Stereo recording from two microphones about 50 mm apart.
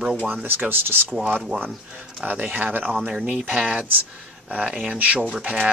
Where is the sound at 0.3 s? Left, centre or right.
Right.